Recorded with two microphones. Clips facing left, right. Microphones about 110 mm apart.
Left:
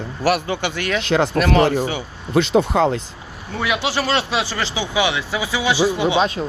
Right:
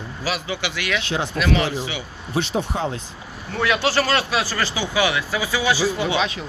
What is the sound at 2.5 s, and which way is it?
Speech, 90° left.